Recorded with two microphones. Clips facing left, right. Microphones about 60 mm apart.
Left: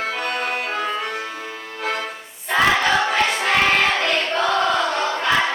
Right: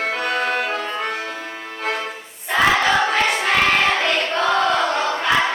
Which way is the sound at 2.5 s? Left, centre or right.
Centre.